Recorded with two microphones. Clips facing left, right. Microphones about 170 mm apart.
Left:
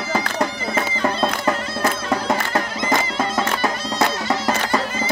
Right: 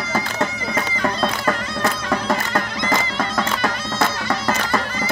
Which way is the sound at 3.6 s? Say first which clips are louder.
Left 1 dB; 20° left (ahead or behind).